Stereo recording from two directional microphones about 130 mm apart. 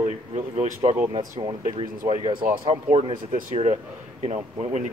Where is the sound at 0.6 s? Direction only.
60° right (ahead or behind).